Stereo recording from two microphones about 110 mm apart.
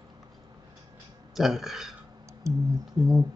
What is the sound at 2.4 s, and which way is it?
Speech, 25° right (ahead or behind).